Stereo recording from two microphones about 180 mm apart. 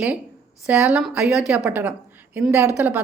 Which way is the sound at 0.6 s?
5° right (ahead or behind).